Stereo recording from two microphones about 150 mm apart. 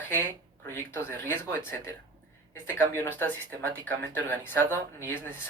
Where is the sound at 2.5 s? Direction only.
15° left (ahead or behind).